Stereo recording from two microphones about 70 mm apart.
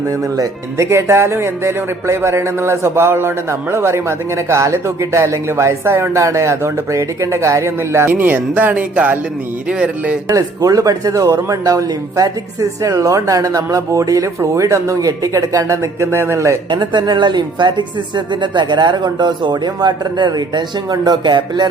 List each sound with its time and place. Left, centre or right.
0.1 s speech: right
8.1 s speech: right
10.3 s speech: right
16.6 s speech: right